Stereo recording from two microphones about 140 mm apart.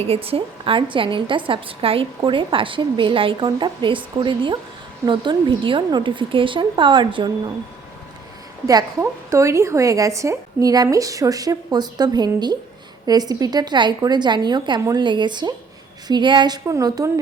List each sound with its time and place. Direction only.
0.1 s a woman's voice: 45° right (ahead or behind)
8.6 s a woman's voice: 20° right (ahead or behind)